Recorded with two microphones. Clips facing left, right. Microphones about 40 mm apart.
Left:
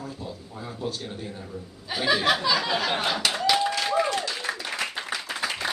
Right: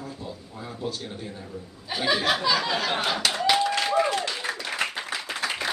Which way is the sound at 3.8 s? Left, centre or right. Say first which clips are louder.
Right 1 dB; centre.